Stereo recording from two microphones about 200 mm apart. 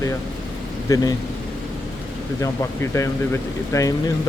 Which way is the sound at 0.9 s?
20° left (ahead or behind).